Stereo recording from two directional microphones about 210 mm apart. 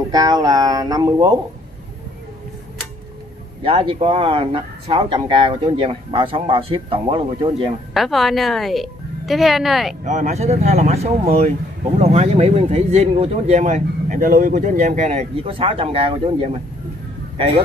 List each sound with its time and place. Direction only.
0.1 s speech: 20° right (ahead or behind)
3.6 s speech: 25° right (ahead or behind)
7.9 s a woman's voice: centre (ahead or behind)
10.0 s speech: 35° right (ahead or behind)